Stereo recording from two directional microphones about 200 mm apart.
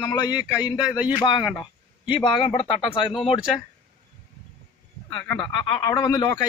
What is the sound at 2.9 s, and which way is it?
Speech, 25° left (ahead or behind).